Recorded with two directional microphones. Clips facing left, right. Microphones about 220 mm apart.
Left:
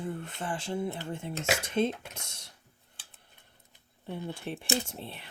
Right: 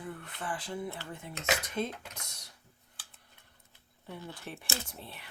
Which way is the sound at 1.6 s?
25° left (ahead or behind).